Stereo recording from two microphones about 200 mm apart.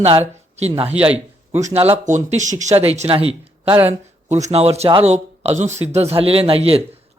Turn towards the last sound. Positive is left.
turn(degrees=-30)  # may be behind; listen again after turning